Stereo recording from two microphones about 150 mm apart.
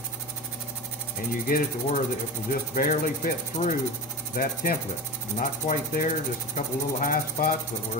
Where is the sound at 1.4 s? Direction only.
75° left (ahead or behind).